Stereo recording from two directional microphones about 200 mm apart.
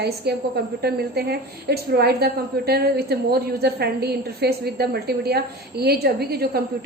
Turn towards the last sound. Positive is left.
turn(degrees=-50)  # may be behind; listen again after turning